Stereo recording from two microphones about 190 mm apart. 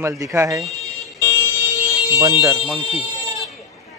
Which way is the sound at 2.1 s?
15° right (ahead or behind).